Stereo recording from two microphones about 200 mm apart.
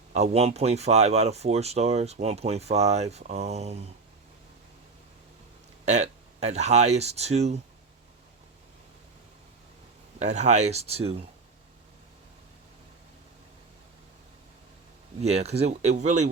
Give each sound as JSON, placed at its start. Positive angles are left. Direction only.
{"t": 0.1, "sound": "speech", "side_deg": -30}
{"t": 5.8, "sound": "speech", "side_deg": -35}
{"t": 10.2, "sound": "speech", "side_deg": -35}
{"t": 15.2, "sound": "speech", "side_deg": -30}